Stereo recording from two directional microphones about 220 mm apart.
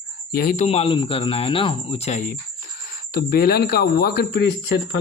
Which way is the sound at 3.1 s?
45° left (ahead or behind).